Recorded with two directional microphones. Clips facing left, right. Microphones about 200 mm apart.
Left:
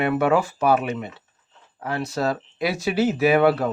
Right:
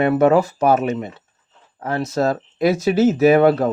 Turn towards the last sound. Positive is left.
turn(degrees=-45)  # may be behind; listen again after turning